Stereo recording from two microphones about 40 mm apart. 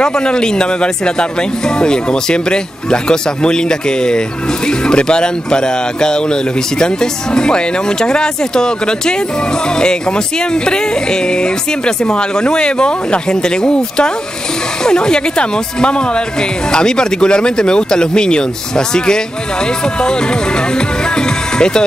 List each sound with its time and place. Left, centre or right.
0.0 s speech: left
20.7 s music: left